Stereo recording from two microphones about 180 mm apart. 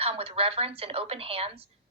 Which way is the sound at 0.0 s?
35° right (ahead or behind).